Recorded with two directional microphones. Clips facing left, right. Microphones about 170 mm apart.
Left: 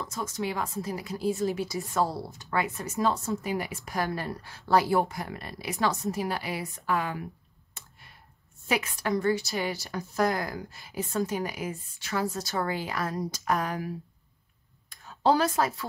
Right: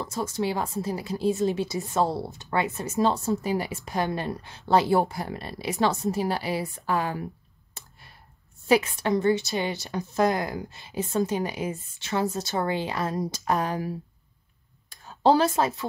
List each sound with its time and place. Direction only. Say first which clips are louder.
0.0 s a woman's voice: right 4 dB; 30° right (ahead or behind)
7.7 s clicking: right 2 dB; 35° right (ahead or behind)
8.6 s a woman's voice: right 7 dB; 30° right (ahead or behind)
14.9 s a sound: right 4 dB; 30° right (ahead or behind)